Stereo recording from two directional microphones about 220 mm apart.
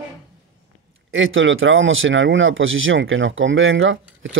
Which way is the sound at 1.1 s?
60° right (ahead or behind).